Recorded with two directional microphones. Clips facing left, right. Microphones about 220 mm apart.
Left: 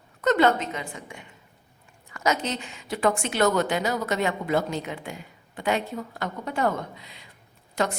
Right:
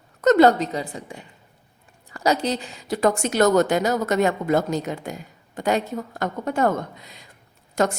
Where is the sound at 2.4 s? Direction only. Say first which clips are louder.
Right 6 dB; 35° right (ahead or behind).